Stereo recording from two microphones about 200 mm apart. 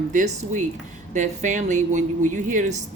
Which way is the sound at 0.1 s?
40° right (ahead or behind).